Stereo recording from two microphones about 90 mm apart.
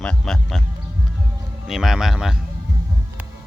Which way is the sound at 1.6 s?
5° right (ahead or behind).